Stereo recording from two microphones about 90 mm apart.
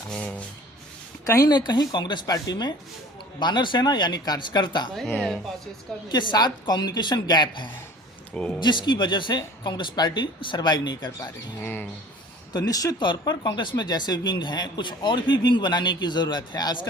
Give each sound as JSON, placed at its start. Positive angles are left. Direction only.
{"t": 0.1, "sound": "rub", "side_deg": 10}
{"t": 1.2, "sound": "a woman's voice", "side_deg": 40}
{"t": 1.5, "sound": "speech", "side_deg": 55}
{"t": 2.2, "sound": "speech", "side_deg": 45}
{"t": 6.1, "sound": "speech", "side_deg": 55}
{"t": 11.6, "sound": "speech", "side_deg": 25}
{"t": 12.5, "sound": "speech", "side_deg": 45}
{"t": 13.0, "sound": "speech", "side_deg": 55}